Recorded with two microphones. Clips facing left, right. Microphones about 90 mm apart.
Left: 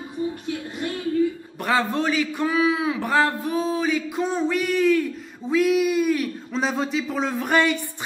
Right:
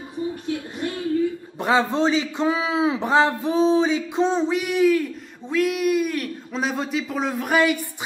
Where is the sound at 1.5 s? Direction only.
20° right (ahead or behind).